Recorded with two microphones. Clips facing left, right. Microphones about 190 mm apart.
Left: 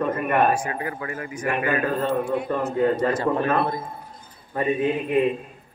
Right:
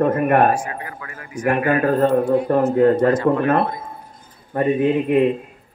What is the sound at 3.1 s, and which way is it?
Speech, 30° left (ahead or behind).